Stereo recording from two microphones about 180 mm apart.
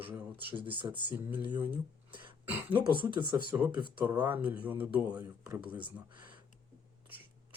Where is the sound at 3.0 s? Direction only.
25° right (ahead or behind).